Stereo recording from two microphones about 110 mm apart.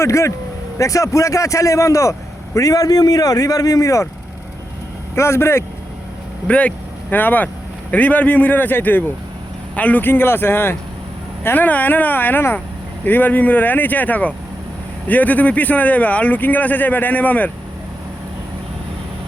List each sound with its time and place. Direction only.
0.0 s a man's voice: 25° left (ahead or behind)
5.1 s a man's voice: 25° left (ahead or behind)
6.5 s a man's voice: 10° left (ahead or behind)